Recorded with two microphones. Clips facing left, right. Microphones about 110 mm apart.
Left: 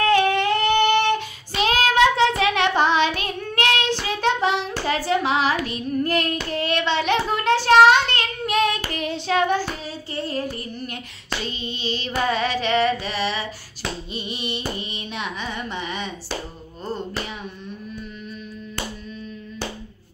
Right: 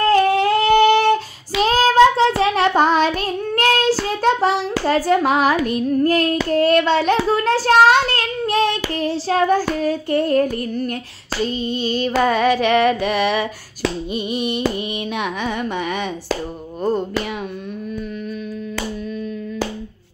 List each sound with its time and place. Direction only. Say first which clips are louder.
0.1 s singing: right 5 dB; 40° right (ahead or behind)
1.6 s child singing: right 5 dB; 35° right (ahead or behind)
9.8 s child singing: right 12 dB; 50° right (ahead or behind)
12.2 s female singing: right 6 dB; 50° right (ahead or behind)
14.1 s child singing: right 8 dB; 50° right (ahead or behind)
15.1 s female singing: right 5 dB; 55° right (ahead or behind)